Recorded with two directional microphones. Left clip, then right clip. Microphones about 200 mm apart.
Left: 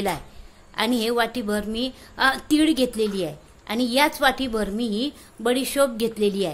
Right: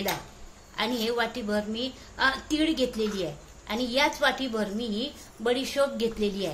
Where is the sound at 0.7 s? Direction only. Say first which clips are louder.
Left 5 dB; 55° left (ahead or behind).